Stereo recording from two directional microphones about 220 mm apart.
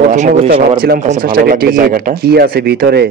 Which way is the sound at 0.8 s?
35° right (ahead or behind).